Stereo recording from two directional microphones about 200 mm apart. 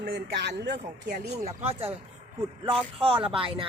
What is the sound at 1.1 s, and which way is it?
Speech, 30° right (ahead or behind).